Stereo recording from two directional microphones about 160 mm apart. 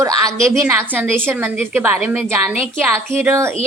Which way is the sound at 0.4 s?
15° right (ahead or behind).